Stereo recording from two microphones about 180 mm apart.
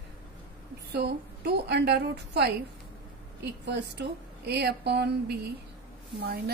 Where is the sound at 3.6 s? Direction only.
70° right (ahead or behind).